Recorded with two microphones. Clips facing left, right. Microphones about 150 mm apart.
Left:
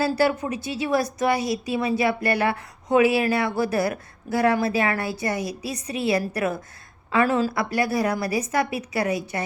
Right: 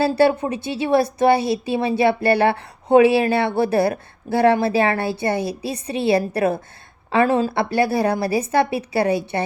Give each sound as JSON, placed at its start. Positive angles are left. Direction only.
{"t": 0.0, "sound": "a woman's voice", "side_deg": -30}